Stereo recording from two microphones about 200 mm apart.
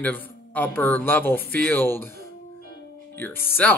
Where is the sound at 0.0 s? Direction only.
10° left (ahead or behind).